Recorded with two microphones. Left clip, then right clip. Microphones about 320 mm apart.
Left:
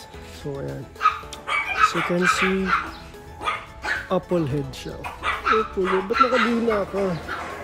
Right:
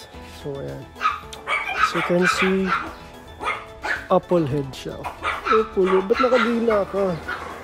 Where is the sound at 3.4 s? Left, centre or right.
Right.